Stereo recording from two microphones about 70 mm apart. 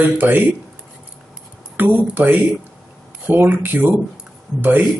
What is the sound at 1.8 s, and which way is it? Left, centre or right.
Speech, right.